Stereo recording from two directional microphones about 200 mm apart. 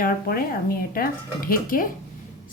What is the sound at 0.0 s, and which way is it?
Speech, 45° left (ahead or behind).